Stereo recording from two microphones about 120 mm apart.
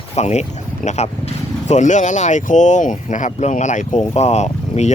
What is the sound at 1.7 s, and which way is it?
Speech, 90° left.